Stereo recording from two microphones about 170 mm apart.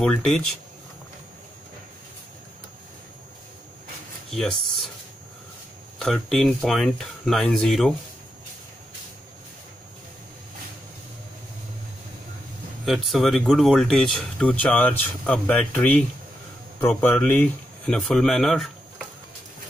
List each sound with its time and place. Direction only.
0.0 s speech: 5° left (ahead or behind)
4.3 s speech: centre (ahead or behind)
5.9 s speech: centre (ahead or behind)
12.8 s speech: centre (ahead or behind)